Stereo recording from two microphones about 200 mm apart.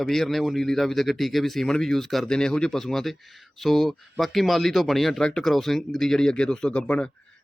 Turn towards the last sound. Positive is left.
turn(degrees=5)  # may be behind; listen again after turning